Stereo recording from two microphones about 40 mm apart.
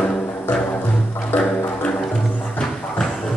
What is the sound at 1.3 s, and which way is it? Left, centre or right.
Music, left.